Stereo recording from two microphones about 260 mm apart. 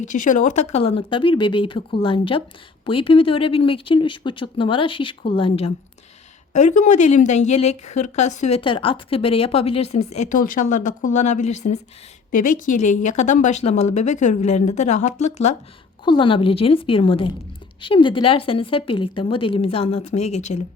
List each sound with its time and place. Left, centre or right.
0.0 s a woman's voice: left